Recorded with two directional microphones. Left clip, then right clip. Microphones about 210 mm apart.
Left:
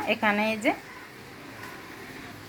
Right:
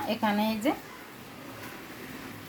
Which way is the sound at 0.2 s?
Centre (ahead or behind).